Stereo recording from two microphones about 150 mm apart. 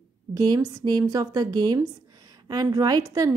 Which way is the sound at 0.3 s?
25° right (ahead or behind).